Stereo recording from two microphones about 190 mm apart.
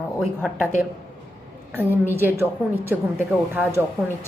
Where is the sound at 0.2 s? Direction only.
5° right (ahead or behind).